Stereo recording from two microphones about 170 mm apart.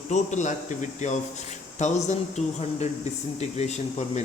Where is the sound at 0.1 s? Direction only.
45° left (ahead or behind).